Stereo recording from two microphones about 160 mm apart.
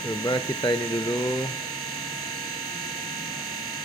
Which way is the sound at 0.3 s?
25° left (ahead or behind).